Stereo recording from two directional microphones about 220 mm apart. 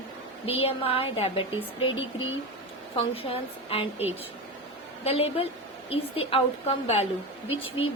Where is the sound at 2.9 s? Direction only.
25° left (ahead or behind).